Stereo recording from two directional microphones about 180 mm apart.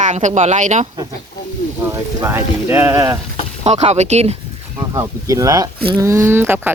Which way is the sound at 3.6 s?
35° right (ahead or behind).